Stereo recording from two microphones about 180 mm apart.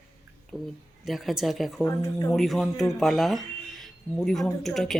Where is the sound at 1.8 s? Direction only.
20° left (ahead or behind).